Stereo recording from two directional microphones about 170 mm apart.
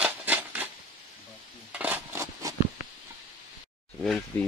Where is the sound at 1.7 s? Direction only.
10° right (ahead or behind).